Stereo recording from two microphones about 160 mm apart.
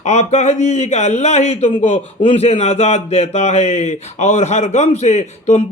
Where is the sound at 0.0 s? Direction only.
45° left (ahead or behind).